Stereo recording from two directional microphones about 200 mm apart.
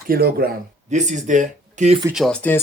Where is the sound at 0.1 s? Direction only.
50° right (ahead or behind).